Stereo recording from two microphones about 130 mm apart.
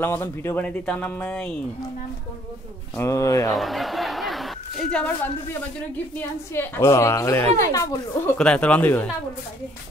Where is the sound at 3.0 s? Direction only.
25° left (ahead or behind).